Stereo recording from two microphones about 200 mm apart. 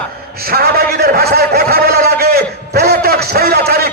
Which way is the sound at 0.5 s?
50° right (ahead or behind).